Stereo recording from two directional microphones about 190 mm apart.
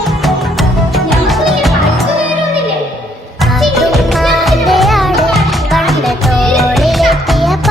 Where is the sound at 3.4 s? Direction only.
Centre (ahead or behind).